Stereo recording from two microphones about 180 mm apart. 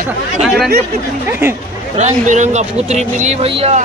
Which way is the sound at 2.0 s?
40° right (ahead or behind).